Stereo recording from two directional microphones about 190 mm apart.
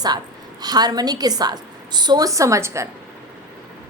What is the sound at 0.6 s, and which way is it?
A woman's voice, 20° right (ahead or behind).